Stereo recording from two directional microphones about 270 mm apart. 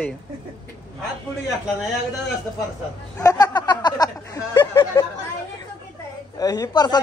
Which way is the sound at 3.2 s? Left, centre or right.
Centre.